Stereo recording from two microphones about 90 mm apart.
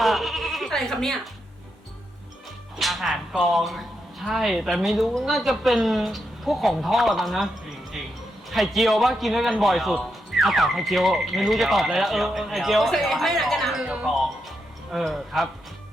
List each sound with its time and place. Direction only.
0.0 s bleat: centre (ahead or behind)
2.7 s music: centre (ahead or behind)
3.4 s a woman's voice: centre (ahead or behind)
7.9 s music: centre (ahead or behind)
8.4 s a woman's voice: centre (ahead or behind)
14.9 s a woman's voice: 5° right (ahead or behind)